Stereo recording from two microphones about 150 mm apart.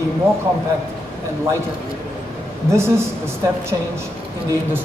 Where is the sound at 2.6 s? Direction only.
15° right (ahead or behind).